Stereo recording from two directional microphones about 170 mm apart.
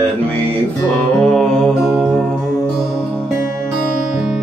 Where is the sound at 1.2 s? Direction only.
5° left (ahead or behind).